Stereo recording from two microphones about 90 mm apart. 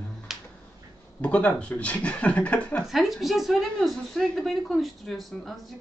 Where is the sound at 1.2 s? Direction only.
15° left (ahead or behind).